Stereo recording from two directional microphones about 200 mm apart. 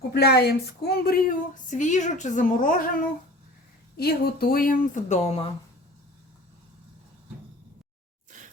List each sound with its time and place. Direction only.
0.1 s a woman's voice: 55° left (ahead or behind)
3.9 s a woman's voice: 50° left (ahead or behind); by 5.5 s 35° left (ahead or behind)
8.3 s a sound: 40° right (ahead or behind)